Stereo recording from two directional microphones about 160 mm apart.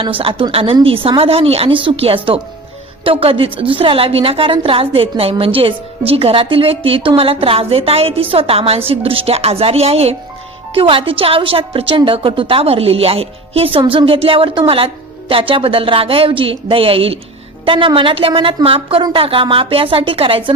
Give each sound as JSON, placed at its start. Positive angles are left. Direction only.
{"t": 0.0, "sound": "a woman's voice", "side_deg": -35}